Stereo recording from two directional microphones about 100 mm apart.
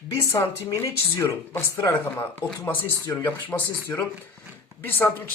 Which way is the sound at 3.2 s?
20° left (ahead or behind).